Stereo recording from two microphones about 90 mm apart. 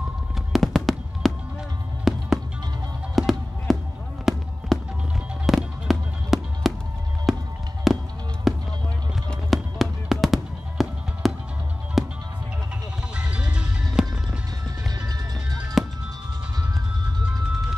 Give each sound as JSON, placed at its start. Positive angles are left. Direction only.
{"t": 0.5, "sound": "fireworks", "side_deg": 0}
{"t": 2.0, "sound": "music", "side_deg": 0}
{"t": 4.3, "sound": "fireworks", "side_deg": 0}
{"t": 4.7, "sound": "music", "side_deg": 0}
{"t": 9.5, "sound": "fireworks", "side_deg": 0}
{"t": 12.0, "sound": "music", "side_deg": 0}
{"t": 13.1, "sound": "music", "side_deg": -10}
{"t": 15.0, "sound": "music", "side_deg": -50}